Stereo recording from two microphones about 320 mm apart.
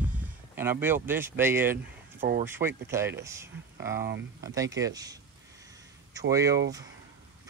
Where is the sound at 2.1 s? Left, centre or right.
Right.